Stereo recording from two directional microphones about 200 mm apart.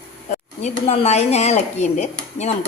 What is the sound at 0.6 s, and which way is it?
Speech, 35° left (ahead or behind).